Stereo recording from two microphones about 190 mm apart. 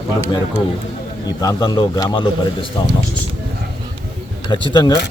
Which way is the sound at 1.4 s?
20° left (ahead or behind).